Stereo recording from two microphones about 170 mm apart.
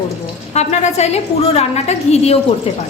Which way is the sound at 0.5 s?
40° left (ahead or behind).